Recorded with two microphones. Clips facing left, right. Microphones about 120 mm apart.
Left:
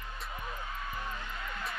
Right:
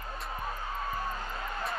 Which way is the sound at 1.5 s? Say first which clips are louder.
Right 5 dB; 30° right (ahead or behind).